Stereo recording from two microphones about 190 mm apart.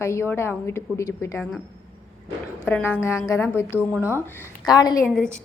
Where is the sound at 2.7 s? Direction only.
10° left (ahead or behind).